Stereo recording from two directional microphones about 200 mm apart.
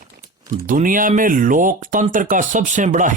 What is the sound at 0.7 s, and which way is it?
A man's voice, 40° right (ahead or behind).